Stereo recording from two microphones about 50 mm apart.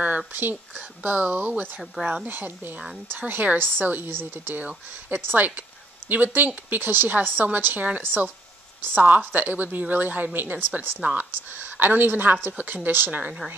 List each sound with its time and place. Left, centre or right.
0.3 s speech: right
11.1 s a sound: right
11.7 s speech: right